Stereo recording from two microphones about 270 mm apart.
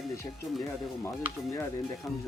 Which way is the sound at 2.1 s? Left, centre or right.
Centre.